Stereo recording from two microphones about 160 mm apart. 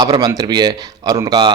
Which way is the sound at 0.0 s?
25° right (ahead or behind).